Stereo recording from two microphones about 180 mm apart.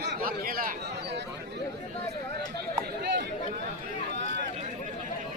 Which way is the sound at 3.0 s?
70° right (ahead or behind).